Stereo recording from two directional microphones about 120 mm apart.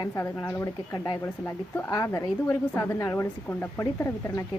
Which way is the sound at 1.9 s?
30° left (ahead or behind).